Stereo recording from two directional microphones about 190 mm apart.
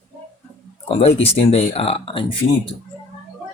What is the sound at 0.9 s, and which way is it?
Speech, 30° left (ahead or behind).